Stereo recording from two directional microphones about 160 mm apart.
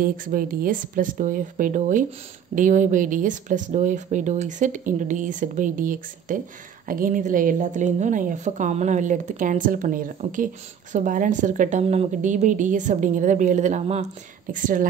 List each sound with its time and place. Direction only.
0.0 s a woman's voice: 60° right (ahead or behind)
11.8 s a woman's voice: 40° right (ahead or behind)
14.5 s speech: 55° right (ahead or behind)